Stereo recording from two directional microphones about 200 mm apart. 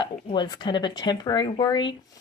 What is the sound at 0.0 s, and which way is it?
Speech, 25° left (ahead or behind).